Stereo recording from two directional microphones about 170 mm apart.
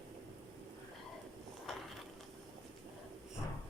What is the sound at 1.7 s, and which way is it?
Mechanisms, centre (ahead or behind).